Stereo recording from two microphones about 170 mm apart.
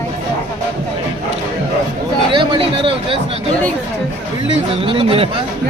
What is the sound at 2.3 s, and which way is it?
Speech, 30° right (ahead or behind).